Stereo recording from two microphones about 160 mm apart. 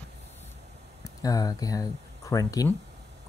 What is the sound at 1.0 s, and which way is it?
Speech, 20° left (ahead or behind).